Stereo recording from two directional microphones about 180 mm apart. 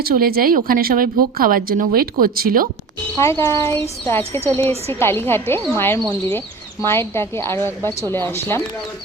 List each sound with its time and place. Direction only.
0.0 s a woman's voice: 55° right (ahead or behind)
3.2 s a child's voice: 15° left (ahead or behind)
6.0 s speech: 30° right (ahead or behind)
6.8 s a child's voice: 15° left (ahead or behind)